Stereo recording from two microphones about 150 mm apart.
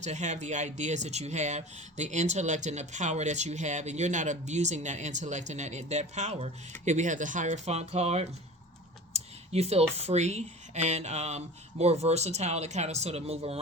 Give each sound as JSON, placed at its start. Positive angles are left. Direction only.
{"t": 0.0, "sound": "speech", "side_deg": -50}